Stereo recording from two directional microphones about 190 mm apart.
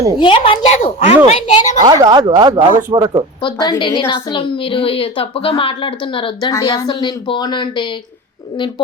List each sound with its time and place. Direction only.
0.2 s a woman's voice: 30° left (ahead or behind)
1.8 s speech: 20° right (ahead or behind)
3.4 s a woman's voice: 25° left (ahead or behind)